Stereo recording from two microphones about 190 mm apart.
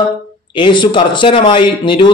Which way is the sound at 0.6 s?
25° left (ahead or behind).